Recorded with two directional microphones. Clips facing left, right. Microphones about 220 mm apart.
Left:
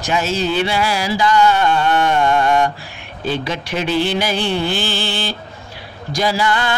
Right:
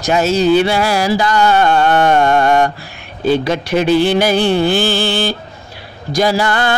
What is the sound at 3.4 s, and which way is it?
Speech, 40° right (ahead or behind).